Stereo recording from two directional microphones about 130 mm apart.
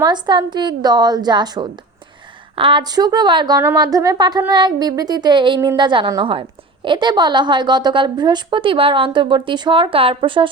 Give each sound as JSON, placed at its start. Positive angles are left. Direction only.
{"t": 0.0, "sound": "a woman's voice", "side_deg": -35}